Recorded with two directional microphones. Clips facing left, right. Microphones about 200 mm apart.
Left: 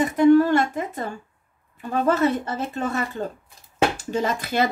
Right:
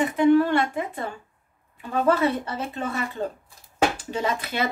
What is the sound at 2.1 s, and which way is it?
Speech, 45° left (ahead or behind).